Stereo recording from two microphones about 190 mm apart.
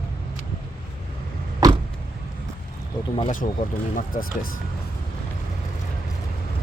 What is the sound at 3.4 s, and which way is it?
Speech, 40° left (ahead or behind).